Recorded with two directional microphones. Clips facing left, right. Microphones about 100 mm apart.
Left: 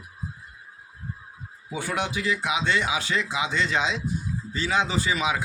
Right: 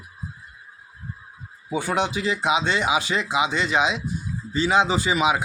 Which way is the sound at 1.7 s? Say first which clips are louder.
Right 5 dB; 20° right (ahead or behind).